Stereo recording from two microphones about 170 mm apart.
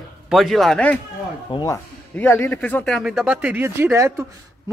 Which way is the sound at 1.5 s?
20° left (ahead or behind).